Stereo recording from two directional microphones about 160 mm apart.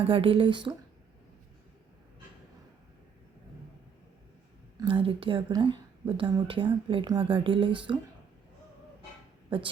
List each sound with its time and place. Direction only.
0.0 s a woman's voice: 35° right (ahead or behind)
4.8 s a woman's voice: 35° right (ahead or behind)
9.5 s a woman's voice: 35° right (ahead or behind)